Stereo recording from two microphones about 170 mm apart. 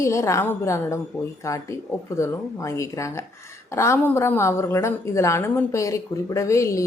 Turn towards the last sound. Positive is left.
turn(degrees=15)  # may be behind; listen again after turning